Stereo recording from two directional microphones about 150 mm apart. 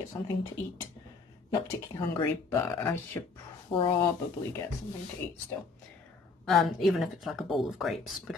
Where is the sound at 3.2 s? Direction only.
15° left (ahead or behind).